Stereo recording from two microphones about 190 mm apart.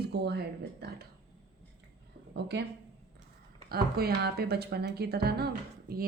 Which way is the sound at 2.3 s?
65° right (ahead or behind).